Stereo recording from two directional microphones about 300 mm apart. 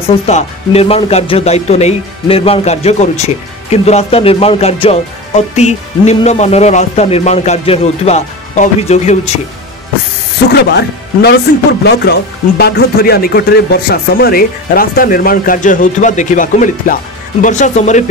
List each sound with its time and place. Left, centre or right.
0.3 s speech: left
10.5 s speech: left